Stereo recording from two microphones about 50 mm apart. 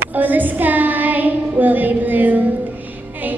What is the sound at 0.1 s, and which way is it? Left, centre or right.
Child singing, right.